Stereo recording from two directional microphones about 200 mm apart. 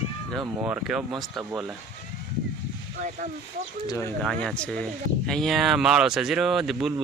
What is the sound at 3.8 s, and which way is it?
Speech, 15° left (ahead or behind).